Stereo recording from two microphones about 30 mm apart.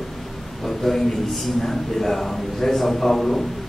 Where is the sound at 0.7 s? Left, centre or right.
Centre.